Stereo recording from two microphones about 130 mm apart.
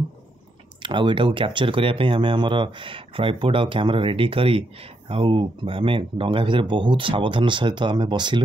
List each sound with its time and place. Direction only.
0.8 s speech: 40° right (ahead or behind)